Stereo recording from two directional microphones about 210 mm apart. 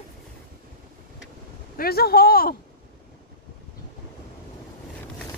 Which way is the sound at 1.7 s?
45° left (ahead or behind).